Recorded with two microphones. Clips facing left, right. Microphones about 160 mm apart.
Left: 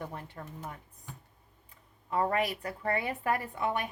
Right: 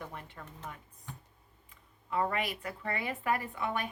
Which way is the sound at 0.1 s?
35° left (ahead or behind).